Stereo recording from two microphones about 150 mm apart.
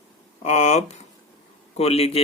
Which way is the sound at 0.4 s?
50° left (ahead or behind).